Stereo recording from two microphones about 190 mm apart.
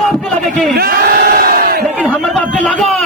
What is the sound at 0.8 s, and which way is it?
Crowd, 55° right (ahead or behind).